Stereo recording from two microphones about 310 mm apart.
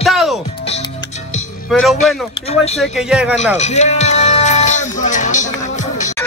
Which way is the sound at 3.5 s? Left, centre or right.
Left.